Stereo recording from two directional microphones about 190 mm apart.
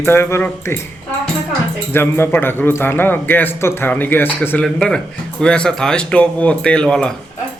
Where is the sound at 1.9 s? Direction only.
10° left (ahead or behind).